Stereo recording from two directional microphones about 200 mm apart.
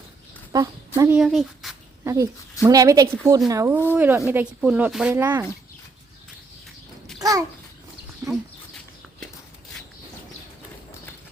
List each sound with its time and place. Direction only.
0.5 s speech: 20° right (ahead or behind)
1.2 s speech: centre (ahead or behind)
2.0 s speech: 15° right (ahead or behind)
7.2 s babbling: 15° right (ahead or behind)